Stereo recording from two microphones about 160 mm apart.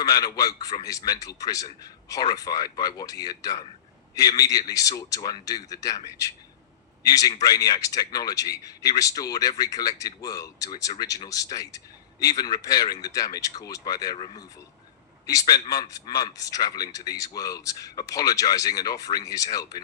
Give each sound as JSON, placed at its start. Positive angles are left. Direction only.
{"t": 0.0, "sound": "speech", "side_deg": 25}